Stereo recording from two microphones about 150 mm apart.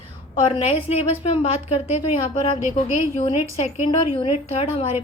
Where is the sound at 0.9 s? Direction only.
45° left (ahead or behind).